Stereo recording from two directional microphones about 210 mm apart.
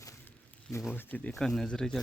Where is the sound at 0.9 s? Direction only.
10° left (ahead or behind).